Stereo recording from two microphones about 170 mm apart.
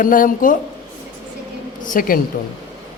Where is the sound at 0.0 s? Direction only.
55° left (ahead or behind).